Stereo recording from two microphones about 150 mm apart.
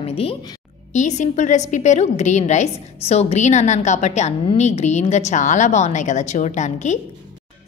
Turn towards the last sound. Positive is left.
turn(degrees=50)  # may be behind; listen again after turning